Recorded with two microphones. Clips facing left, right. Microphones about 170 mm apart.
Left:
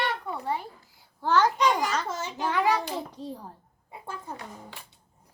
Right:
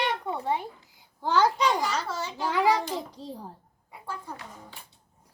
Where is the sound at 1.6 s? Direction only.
15° left (ahead or behind).